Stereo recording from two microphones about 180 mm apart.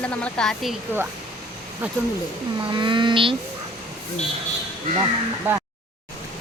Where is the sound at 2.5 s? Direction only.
25° right (ahead or behind).